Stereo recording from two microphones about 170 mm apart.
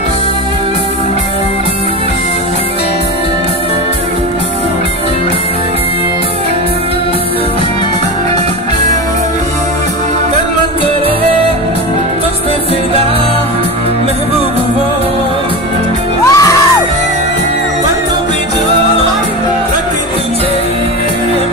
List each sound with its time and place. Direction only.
16.3 s music: 20° left (ahead or behind)